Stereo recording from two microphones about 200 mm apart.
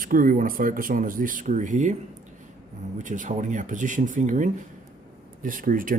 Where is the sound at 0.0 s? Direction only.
45° right (ahead or behind).